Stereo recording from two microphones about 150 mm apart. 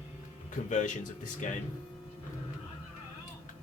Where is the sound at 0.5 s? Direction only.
55° left (ahead or behind).